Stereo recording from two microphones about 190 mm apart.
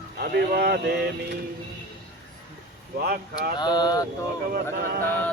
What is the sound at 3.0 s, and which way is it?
Speech, 55° right (ahead or behind).